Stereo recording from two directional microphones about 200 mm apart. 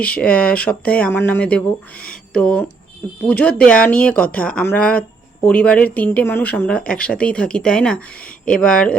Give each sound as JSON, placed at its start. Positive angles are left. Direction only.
{"t": 0.0, "sound": "speech", "side_deg": 5}